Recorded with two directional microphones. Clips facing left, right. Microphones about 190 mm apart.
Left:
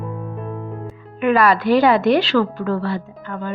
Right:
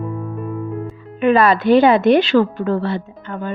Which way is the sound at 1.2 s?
25° right (ahead or behind).